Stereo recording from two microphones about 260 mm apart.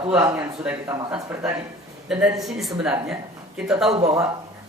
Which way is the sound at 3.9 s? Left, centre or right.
Right.